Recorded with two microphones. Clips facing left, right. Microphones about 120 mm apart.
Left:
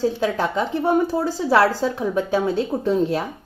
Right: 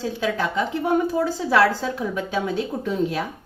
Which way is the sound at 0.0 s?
40° left (ahead or behind).